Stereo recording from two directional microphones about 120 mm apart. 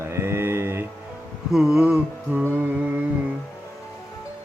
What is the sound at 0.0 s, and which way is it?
Mantra, 20° right (ahead or behind).